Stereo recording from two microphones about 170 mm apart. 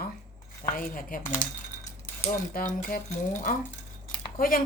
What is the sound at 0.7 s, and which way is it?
A woman's voice, 55° left (ahead or behind).